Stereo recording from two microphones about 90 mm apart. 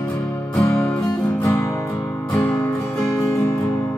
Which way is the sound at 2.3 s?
20° left (ahead or behind).